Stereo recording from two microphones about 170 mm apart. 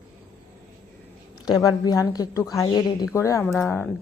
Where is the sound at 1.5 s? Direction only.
25° left (ahead or behind).